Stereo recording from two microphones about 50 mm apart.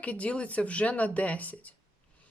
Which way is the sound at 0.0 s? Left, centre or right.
Left.